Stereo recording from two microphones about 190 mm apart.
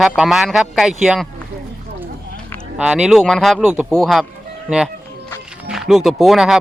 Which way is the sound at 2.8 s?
5° right (ahead or behind).